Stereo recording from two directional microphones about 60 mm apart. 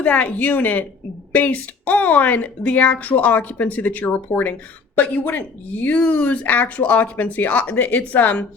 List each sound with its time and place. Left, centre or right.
0.0 s speech: left